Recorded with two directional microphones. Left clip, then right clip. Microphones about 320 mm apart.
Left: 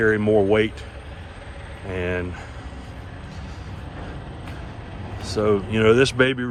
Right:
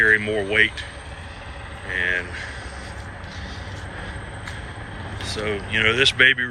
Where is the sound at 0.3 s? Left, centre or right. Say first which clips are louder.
Left 6 dB; left.